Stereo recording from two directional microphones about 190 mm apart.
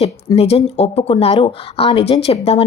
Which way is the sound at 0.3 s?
35° left (ahead or behind).